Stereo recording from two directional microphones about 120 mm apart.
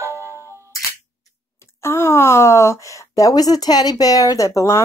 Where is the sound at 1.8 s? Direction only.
20° left (ahead or behind).